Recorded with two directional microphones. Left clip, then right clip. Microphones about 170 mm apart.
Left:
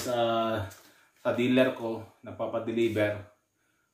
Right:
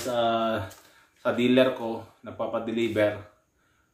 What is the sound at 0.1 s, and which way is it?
Speech, 15° right (ahead or behind).